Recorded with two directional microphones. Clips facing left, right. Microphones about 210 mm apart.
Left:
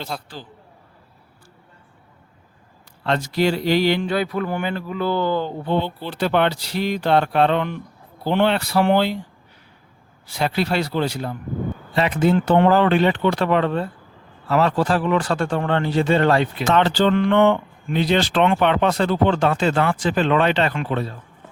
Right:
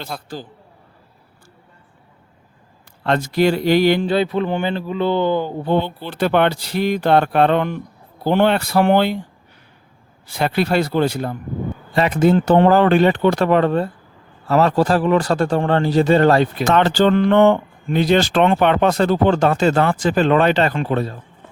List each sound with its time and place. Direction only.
0.1 s a man's voice: centre (ahead or behind)
3.0 s speech: 50° right (ahead or behind)
4.0 s speech: 25° right (ahead or behind)
6.1 s speech: 55° right (ahead or behind)
10.2 s speech: 55° right (ahead or behind)